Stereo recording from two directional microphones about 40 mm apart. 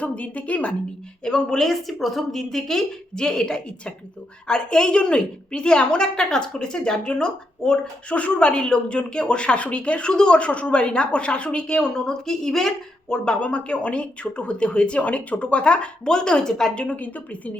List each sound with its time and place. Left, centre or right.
0.0 s a woman's voice: left
1.2 s a woman's voice: centre
8.1 s speech: left
10.4 s speech: left
12.0 s a woman's voice: centre
13.2 s speech: left; by 16.7 s centre
16.7 s a woman's voice: left